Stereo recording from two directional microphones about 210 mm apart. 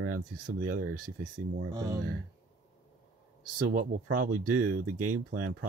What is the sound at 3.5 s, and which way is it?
Speech, 40° right (ahead or behind).